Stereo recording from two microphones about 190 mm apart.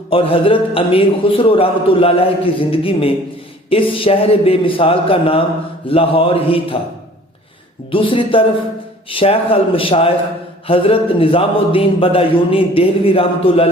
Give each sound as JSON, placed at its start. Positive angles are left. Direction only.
{"t": 0.1, "sound": "a man's voice", "side_deg": 30}
{"t": 7.9, "sound": "a man's voice", "side_deg": 30}